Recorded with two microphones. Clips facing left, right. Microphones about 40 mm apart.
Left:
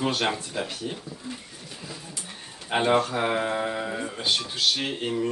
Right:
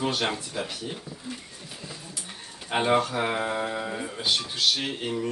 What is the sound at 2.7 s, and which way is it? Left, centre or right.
Speech, centre.